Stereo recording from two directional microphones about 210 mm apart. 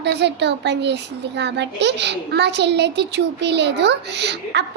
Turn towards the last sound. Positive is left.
turn(degrees=-55)  # may be behind; listen again after turning